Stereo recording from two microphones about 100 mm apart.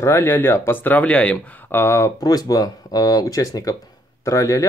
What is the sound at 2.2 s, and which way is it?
Speech, 40° left (ahead or behind).